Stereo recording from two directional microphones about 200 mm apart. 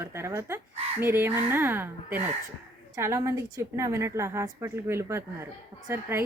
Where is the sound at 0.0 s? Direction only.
15° right (ahead or behind).